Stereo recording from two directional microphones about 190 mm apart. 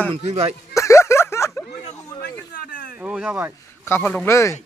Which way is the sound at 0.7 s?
15° left (ahead or behind).